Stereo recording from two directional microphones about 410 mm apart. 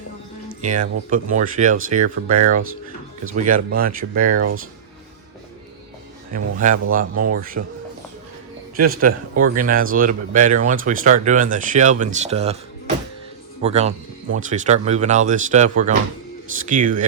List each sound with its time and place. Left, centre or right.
0.6 s speech: centre
6.3 s speech: centre
8.8 s speech: right
13.6 s speech: centre